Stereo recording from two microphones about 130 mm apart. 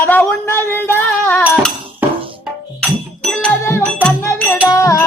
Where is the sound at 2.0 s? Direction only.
15° right (ahead or behind).